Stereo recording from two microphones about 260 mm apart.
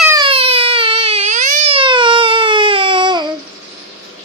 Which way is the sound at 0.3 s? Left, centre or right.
Right.